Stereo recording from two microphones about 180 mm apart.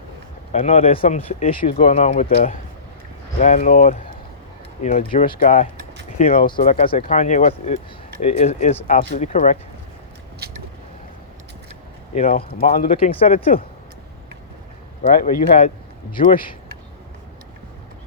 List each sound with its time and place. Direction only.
0.5 s speech: 35° left (ahead or behind)
10.4 s vehicle: 60° right (ahead or behind)
12.1 s speech: 40° left (ahead or behind)
13.1 s speech: 35° left (ahead or behind)
15.1 s speech: 50° left (ahead or behind)